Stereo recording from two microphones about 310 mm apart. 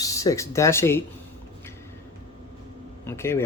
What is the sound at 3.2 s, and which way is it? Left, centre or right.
Speech, centre.